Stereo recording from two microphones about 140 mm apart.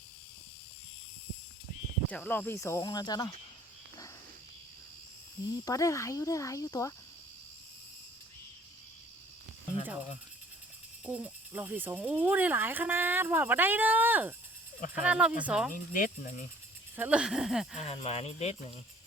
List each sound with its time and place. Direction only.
2.0 s speech: 10° left (ahead or behind); by 3.3 s 30° left (ahead or behind)
5.6 s speech: 25° left (ahead or behind)
11.0 s speech: 10° right (ahead or behind)
15.7 s speech: 80° left
17.0 s speech: 5° right (ahead or behind)
17.7 s speech: 45° left (ahead or behind)